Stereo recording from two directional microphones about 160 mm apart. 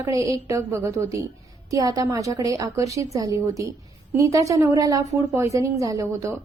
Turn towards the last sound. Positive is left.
turn(degrees=-20)  # may be behind; listen again after turning